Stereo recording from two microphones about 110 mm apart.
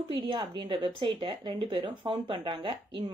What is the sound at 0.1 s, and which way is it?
Speech, 40° right (ahead or behind).